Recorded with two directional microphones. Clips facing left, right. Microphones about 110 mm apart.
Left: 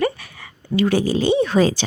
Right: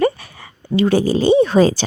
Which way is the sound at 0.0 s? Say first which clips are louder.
Right 4 dB; 30° right (ahead or behind).